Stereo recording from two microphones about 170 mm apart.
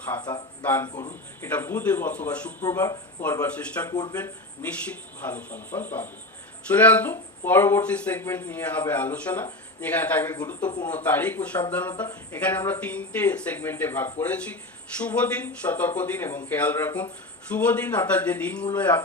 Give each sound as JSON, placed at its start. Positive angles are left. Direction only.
{"t": 0.2, "sound": "a man's voice", "side_deg": 25}
{"t": 0.6, "sound": "speech", "side_deg": 10}
{"t": 2.6, "sound": "speech", "side_deg": 20}
{"t": 3.9, "sound": "a man's voice", "side_deg": 25}
{"t": 5.2, "sound": "speech", "side_deg": 10}